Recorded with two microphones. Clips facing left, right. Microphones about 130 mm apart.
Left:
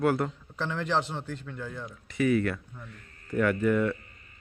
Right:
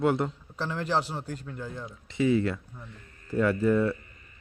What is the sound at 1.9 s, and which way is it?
A man's voice, 25° right (ahead or behind).